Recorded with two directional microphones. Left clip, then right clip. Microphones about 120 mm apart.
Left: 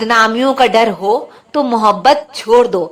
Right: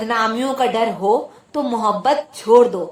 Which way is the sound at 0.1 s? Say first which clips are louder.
Left 8 dB; 35° left (ahead or behind).